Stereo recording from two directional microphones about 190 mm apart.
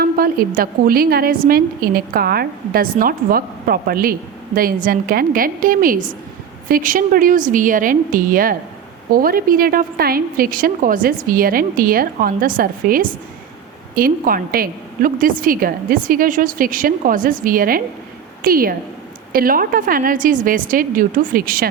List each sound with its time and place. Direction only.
0.0 s a woman's voice: 50° right (ahead or behind)